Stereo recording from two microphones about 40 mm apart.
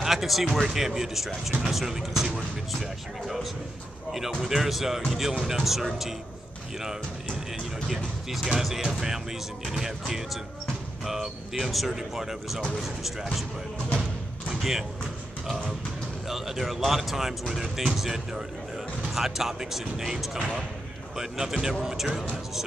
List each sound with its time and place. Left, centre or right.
0.0 s speech: centre
4.4 s speech: centre
7.5 s speech: centre
14.5 s speech: centre
16.3 s speech: centre
21.2 s speech: centre